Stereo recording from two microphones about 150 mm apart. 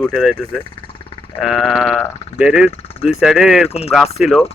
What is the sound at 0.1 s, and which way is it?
Speech, centre (ahead or behind).